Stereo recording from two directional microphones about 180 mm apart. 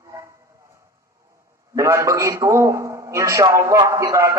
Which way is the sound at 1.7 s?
15° right (ahead or behind).